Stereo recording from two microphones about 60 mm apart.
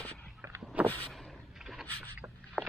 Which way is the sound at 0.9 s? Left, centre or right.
Left.